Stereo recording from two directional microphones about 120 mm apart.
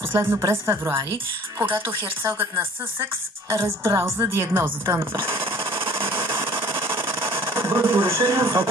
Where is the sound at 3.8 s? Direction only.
20° right (ahead or behind).